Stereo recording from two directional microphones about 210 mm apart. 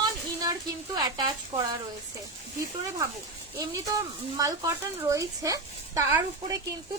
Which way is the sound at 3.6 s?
15° right (ahead or behind).